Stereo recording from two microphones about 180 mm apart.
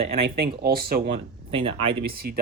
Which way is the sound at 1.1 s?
30° right (ahead or behind).